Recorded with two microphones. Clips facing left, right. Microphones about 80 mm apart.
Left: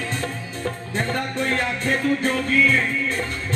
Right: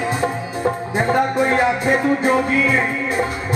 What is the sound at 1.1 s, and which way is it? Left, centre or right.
Music, centre.